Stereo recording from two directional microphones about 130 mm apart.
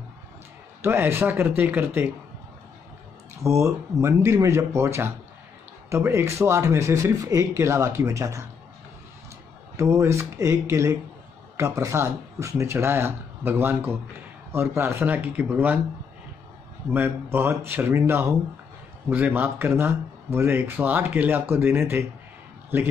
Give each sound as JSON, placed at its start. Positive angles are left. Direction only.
{"t": 0.8, "sound": "speech", "side_deg": -20}
{"t": 3.6, "sound": "speech", "side_deg": -25}
{"t": 9.8, "sound": "speech", "side_deg": -20}
{"t": 16.9, "sound": "speech", "side_deg": -15}